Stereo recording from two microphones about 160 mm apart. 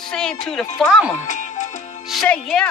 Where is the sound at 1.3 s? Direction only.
50° left (ahead or behind).